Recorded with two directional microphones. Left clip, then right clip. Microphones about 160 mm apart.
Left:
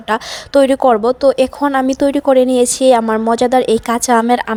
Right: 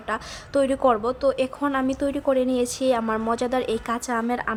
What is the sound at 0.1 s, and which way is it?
Speech, 50° left (ahead or behind).